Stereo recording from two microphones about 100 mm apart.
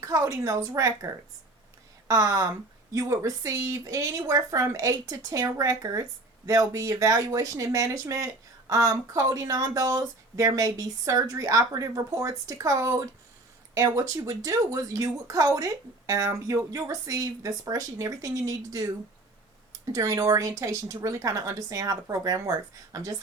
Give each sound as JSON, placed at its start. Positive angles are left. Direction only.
{"t": 0.0, "sound": "speech", "side_deg": -35}